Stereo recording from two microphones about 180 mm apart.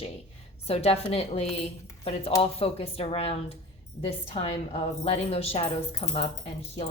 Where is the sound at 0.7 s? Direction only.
35° left (ahead or behind).